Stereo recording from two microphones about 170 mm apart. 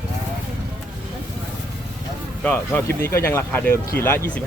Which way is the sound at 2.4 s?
10° left (ahead or behind).